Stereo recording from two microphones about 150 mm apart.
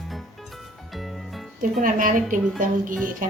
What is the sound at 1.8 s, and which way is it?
A woman's voice, 65° right (ahead or behind).